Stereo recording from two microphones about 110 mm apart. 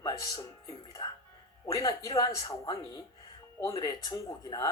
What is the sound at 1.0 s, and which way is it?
Speech, 50° left (ahead or behind).